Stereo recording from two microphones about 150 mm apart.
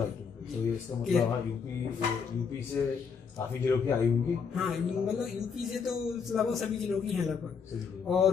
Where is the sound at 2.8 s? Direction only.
15° left (ahead or behind).